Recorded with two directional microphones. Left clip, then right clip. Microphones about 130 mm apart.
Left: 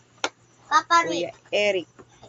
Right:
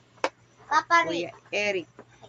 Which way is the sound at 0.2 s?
15° left (ahead or behind).